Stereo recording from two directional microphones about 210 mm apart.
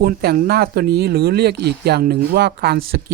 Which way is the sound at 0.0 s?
45° right (ahead or behind).